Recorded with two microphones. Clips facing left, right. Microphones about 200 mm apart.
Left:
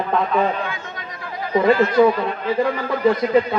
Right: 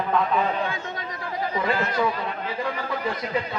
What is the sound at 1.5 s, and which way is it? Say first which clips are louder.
Speech: left 11 dB; 40° left (ahead or behind).